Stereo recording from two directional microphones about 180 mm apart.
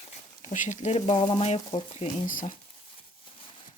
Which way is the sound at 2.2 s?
50° left (ahead or behind).